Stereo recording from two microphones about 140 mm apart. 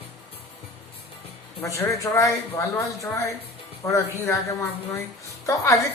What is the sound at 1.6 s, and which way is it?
Speech, 20° left (ahead or behind).